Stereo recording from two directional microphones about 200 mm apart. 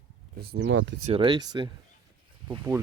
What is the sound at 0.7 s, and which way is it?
Speech, 75° right (ahead or behind).